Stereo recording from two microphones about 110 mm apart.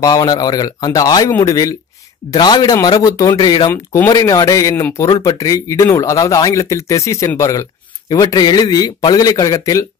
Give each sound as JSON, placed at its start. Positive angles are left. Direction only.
{"t": 0.0, "sound": "a man's voice", "side_deg": 35}
{"t": 3.7, "sound": "speech", "side_deg": 25}
{"t": 4.1, "sound": "a man's voice", "side_deg": 35}
{"t": 8.1, "sound": "a man's voice", "side_deg": 40}